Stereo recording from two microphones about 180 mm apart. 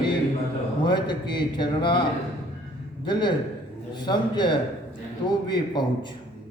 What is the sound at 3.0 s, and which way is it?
A man's voice, 25° left (ahead or behind).